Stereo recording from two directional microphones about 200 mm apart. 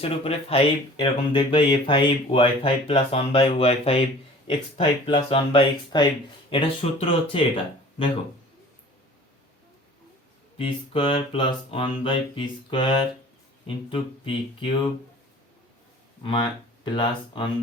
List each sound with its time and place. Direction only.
0.0 s speech: 30° left (ahead or behind)
10.6 s speech: 25° left (ahead or behind)
16.2 s speech: 25° left (ahead or behind)